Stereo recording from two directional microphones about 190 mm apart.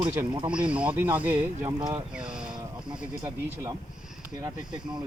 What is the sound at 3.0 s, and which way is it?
Speech, 10° right (ahead or behind).